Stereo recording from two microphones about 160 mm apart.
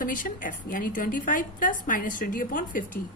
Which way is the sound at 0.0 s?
60° left (ahead or behind).